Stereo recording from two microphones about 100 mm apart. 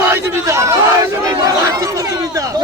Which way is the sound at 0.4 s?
30° right (ahead or behind).